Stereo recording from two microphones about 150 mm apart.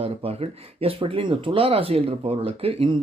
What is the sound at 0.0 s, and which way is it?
Speech, 40° right (ahead or behind).